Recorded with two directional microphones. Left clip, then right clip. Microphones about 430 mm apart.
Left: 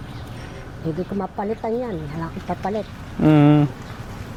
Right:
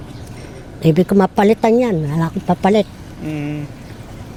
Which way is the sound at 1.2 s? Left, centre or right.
Right.